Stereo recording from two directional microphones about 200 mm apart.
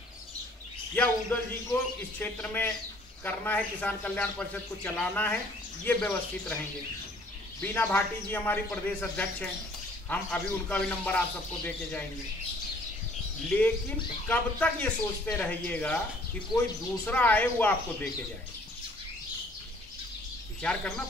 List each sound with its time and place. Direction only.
0.9 s a man's voice: 5° left (ahead or behind)
7.6 s a man's voice: 10° left (ahead or behind)
13.5 s a man's voice: 5° left (ahead or behind)
20.6 s speech: 5° left (ahead or behind)